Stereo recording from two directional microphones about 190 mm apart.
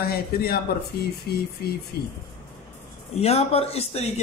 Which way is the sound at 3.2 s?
35° left (ahead or behind).